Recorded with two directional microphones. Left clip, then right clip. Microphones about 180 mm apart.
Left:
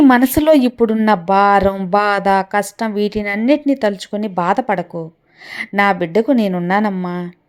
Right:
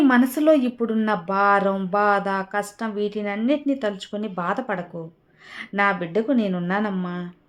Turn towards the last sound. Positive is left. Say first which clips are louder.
# left 8 dB
turn(degrees=30)  # may be behind; listen again after turning